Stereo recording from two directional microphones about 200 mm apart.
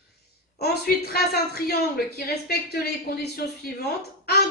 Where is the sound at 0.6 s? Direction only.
50° left (ahead or behind).